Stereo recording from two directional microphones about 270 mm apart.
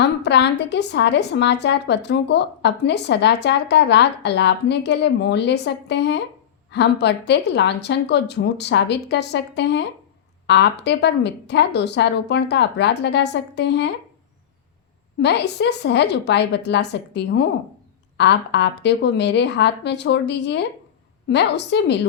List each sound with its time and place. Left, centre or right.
0.0 s a woman's voice: left
15.2 s a woman's voice: left